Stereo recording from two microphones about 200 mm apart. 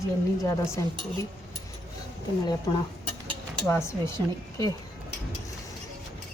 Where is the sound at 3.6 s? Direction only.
10° left (ahead or behind).